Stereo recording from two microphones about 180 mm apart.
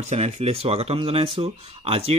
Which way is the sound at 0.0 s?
40° right (ahead or behind).